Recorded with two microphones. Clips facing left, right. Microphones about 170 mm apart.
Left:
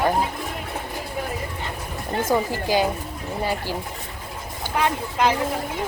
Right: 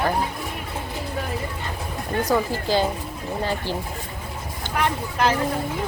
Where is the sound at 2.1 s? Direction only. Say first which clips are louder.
Even; 25° left (ahead or behind).